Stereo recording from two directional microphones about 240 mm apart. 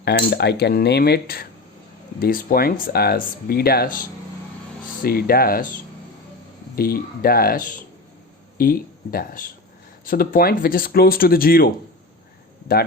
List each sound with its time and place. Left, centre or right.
0.0 s speech: left
5.0 s speech: left